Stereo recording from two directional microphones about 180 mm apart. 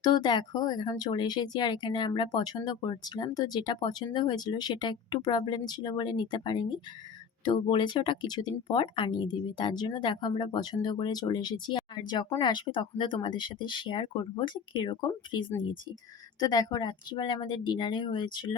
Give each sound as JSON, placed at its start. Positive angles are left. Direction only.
{"t": 0.0, "sound": "speech", "side_deg": 25}